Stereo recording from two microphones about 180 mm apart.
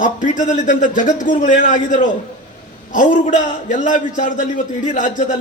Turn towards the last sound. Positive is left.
turn(degrees=45)  # may be behind; listen again after turning